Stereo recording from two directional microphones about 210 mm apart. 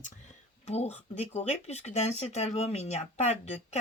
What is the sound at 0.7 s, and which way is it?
Speech, 30° left (ahead or behind).